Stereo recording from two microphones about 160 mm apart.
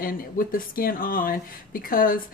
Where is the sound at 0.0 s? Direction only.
65° left (ahead or behind).